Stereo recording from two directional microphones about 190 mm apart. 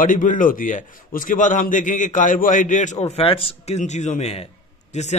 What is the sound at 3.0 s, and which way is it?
A man's voice, 30° left (ahead or behind).